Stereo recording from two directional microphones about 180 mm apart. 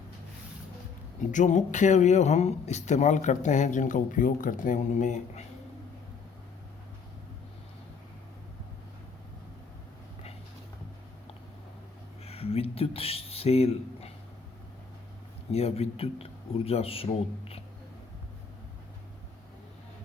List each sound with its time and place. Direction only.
1.3 s speech: 45° left (ahead or behind)
12.2 s a sound: 35° left (ahead or behind)
15.5 s speech: 35° left (ahead or behind)